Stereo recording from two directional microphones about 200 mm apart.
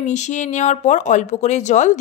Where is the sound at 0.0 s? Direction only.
35° left (ahead or behind).